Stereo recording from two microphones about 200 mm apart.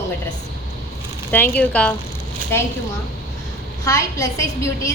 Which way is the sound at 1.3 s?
10° left (ahead or behind).